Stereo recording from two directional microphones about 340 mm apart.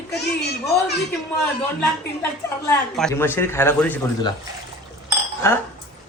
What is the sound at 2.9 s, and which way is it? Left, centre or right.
Speech, centre.